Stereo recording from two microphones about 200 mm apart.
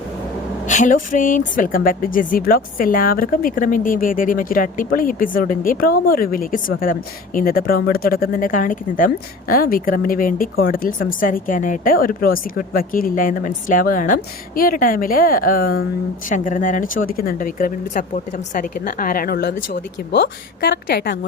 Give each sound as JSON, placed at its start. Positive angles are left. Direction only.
{"t": 0.7, "sound": "speech", "side_deg": 40}